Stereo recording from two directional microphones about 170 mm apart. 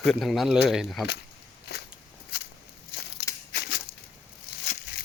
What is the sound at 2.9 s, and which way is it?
Crushing, 75° left (ahead or behind).